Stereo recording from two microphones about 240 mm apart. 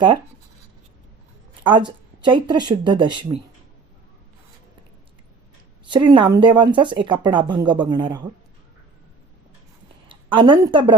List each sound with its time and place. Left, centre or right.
1.6 s a woman's voice: centre
5.9 s speech: centre
10.1 s speech: right